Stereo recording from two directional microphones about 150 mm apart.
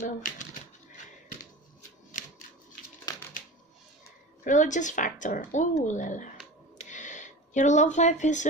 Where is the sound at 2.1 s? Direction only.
60° left (ahead or behind).